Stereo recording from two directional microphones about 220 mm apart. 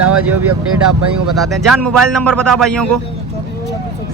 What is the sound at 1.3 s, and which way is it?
Speech, centre (ahead or behind).